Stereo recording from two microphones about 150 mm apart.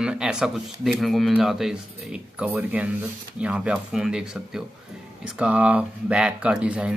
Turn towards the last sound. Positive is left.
turn(degrees=-10)  # may be behind; listen again after turning